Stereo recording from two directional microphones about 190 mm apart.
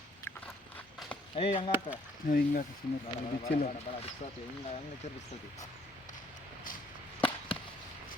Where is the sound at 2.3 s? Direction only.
50° left (ahead or behind).